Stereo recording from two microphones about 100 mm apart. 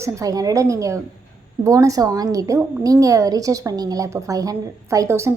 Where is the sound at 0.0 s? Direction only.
35° right (ahead or behind).